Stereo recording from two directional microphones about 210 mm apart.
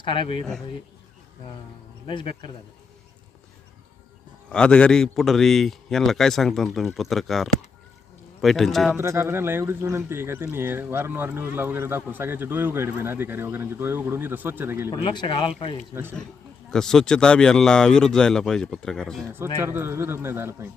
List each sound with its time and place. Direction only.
0.0 s speech: 25° left (ahead or behind)
2.0 s speech: 25° left (ahead or behind)
4.4 s a man's voice: 5° left (ahead or behind)
9.0 s speech: 10° right (ahead or behind)
14.8 s speech: 20° left (ahead or behind)
16.6 s a man's voice: 5° left (ahead or behind)
19.5 s speech: 10° right (ahead or behind)